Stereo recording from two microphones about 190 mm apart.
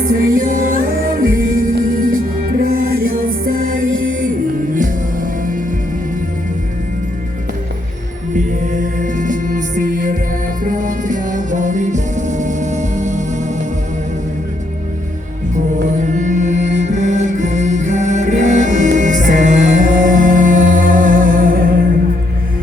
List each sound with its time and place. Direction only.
0.2 s music: 45° right (ahead or behind)
8.6 s music: 40° right (ahead or behind)
16.1 s music: 40° right (ahead or behind)